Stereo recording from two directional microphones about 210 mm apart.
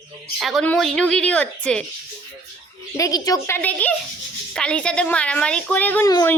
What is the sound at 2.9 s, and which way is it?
A woman's voice, 15° left (ahead or behind).